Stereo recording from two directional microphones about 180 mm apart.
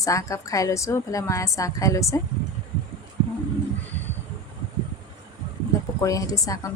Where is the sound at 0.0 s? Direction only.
20° left (ahead or behind).